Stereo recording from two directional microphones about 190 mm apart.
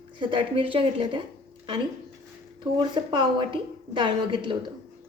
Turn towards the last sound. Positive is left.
turn(degrees=-25)  # may be behind; listen again after turning